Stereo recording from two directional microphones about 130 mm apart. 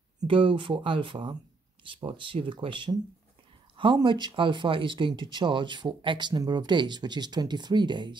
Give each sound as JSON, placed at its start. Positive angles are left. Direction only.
{"t": 0.3, "sound": "speech", "side_deg": -40}